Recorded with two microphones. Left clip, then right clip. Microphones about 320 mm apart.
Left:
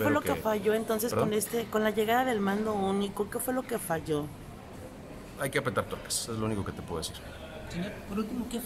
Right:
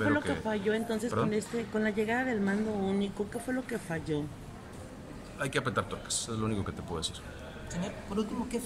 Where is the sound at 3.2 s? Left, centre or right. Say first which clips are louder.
Left 3 dB; left.